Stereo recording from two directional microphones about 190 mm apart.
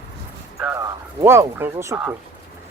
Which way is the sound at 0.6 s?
10° right (ahead or behind).